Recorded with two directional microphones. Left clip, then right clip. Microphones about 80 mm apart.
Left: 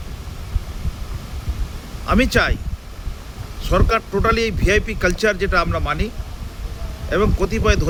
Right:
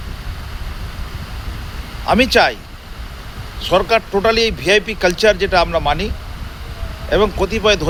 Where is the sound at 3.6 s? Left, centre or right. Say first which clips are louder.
Right 5 dB; left.